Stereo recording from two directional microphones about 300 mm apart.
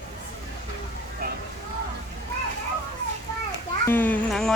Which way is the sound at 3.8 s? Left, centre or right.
Centre.